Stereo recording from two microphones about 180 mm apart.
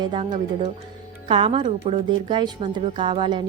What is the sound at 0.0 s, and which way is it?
Speech, 25° right (ahead or behind).